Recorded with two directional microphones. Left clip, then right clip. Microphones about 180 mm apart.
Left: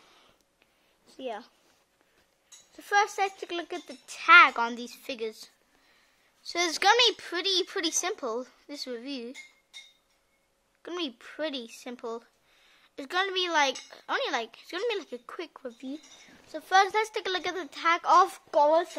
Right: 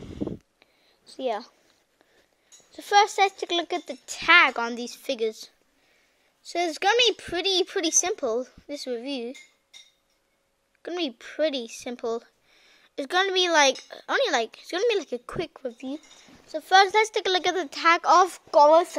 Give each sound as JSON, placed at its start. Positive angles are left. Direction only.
{"t": 1.0, "sound": "a woman's voice", "side_deg": -25}
{"t": 2.7, "sound": "speech", "side_deg": -20}
{"t": 6.5, "sound": "speech", "side_deg": -5}
{"t": 10.8, "sound": "speech", "side_deg": -15}